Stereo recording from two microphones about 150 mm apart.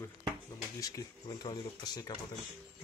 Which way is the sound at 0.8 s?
25° left (ahead or behind).